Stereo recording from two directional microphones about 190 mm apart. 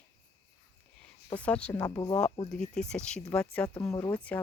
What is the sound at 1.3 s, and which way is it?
Speech, 5° left (ahead or behind).